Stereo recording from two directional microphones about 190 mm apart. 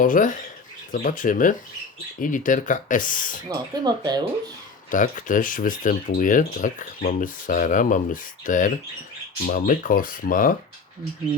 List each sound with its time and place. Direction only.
0.0 s speech: 45° left (ahead or behind)
3.5 s speech: 20° right (ahead or behind)
4.9 s speech: 45° left (ahead or behind)